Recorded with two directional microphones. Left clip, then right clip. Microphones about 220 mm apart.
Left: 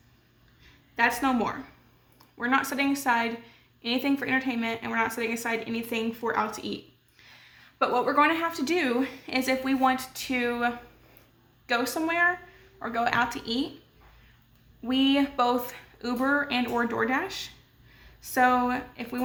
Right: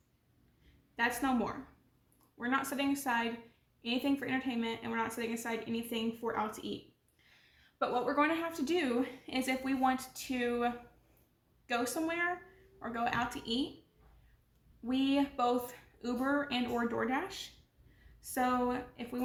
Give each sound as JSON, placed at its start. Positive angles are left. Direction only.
{"t": 0.9, "sound": "a woman's voice", "side_deg": 20}
{"t": 7.8, "sound": "a woman's voice", "side_deg": 25}
{"t": 14.8, "sound": "a woman's voice", "side_deg": 20}